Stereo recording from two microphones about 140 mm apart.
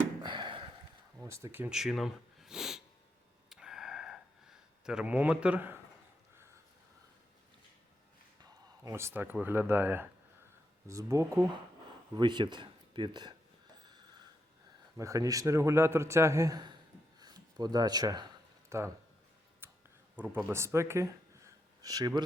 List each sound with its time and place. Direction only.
0.2 s a sound: 35° right (ahead or behind)
1.2 s speech: 15° right (ahead or behind)
1.8 s speech: centre (ahead or behind)
3.5 s a sound: 5° right (ahead or behind)
4.9 s speech: 10° right (ahead or behind)
8.4 s a man's voice: 25° right (ahead or behind)
12.1 s speech: 35° right (ahead or behind)
14.9 s a man's voice: 25° right (ahead or behind)
17.2 s a sound: 30° right (ahead or behind)
18.7 s a man's voice: 20° right (ahead or behind)
19.6 s a sound: 15° right (ahead or behind)
20.1 s speech: 15° right (ahead or behind)